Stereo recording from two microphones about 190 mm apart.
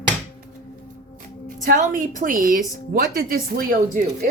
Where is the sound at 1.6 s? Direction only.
45° right (ahead or behind).